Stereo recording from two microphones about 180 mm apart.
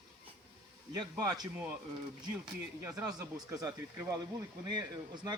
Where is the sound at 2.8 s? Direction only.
10° right (ahead or behind).